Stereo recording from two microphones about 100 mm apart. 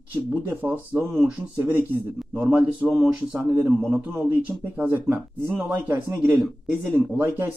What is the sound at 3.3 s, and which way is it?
A man's voice, 20° right (ahead or behind).